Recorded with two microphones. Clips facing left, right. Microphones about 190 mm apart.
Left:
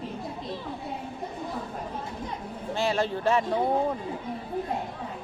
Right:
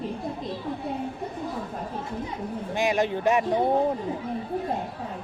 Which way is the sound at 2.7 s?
15° right (ahead or behind).